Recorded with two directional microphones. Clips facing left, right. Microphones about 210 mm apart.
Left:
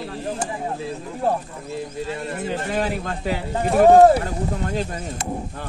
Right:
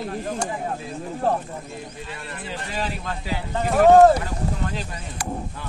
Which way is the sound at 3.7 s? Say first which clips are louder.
Left 1 dB; 10° left (ahead or behind).